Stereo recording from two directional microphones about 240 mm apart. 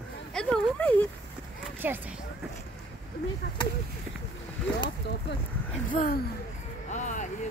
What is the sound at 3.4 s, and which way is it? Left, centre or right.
Speech, left.